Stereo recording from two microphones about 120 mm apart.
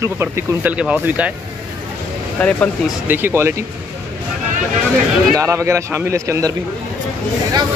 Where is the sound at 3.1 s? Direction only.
20° right (ahead or behind).